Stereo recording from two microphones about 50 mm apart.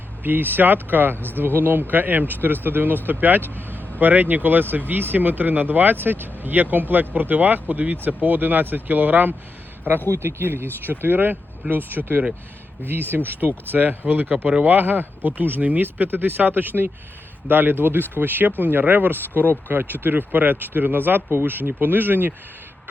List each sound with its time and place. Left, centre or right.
0.2 s speech: right
1.1 s speech: left
1.4 s speech: right
3.4 s vehicle: left
4.0 s speech: right
10.1 s speech: right
14.8 s speech: right